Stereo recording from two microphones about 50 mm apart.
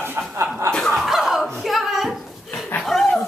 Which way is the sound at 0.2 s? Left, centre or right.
Right.